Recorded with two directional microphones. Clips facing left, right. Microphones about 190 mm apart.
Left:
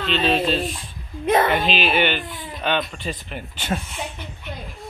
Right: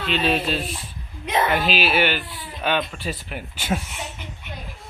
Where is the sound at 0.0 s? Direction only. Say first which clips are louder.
Left 2 dB; 10° right (ahead or behind).